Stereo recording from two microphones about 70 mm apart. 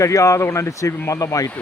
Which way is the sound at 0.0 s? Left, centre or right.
Left.